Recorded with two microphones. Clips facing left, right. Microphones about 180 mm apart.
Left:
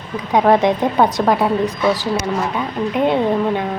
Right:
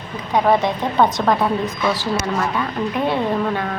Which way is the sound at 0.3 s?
15° left (ahead or behind).